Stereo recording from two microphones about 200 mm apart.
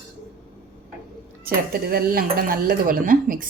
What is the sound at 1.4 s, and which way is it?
Speech, 45° right (ahead or behind).